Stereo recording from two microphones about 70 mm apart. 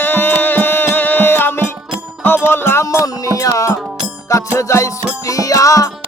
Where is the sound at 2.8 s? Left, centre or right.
Left.